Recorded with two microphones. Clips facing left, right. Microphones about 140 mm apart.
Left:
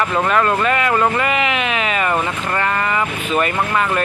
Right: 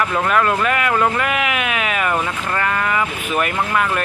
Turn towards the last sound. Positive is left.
turn(degrees=0)  # may be behind; listen again after turning